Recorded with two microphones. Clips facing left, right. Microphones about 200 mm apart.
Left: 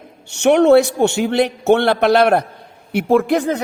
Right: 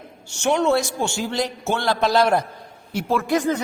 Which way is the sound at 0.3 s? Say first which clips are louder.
Left 8 dB; 65° left (ahead or behind).